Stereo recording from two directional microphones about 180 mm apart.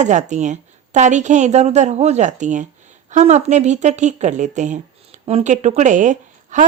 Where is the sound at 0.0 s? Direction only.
40° right (ahead or behind).